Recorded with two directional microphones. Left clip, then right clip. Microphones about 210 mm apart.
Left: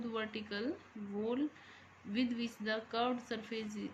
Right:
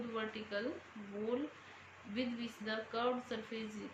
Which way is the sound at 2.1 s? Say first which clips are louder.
Left 3 dB; 55° left (ahead or behind).